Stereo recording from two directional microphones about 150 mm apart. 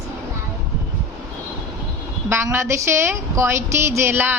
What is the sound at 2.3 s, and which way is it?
A woman's voice, 15° right (ahead or behind).